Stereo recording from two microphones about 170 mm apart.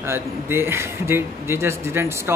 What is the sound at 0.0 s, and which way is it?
Speech, 15° right (ahead or behind).